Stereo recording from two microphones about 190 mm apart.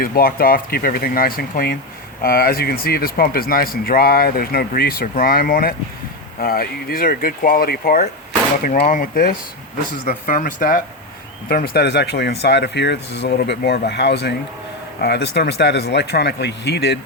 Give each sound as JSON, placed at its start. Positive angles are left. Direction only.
{"t": 0.0, "sound": "speech", "side_deg": 50}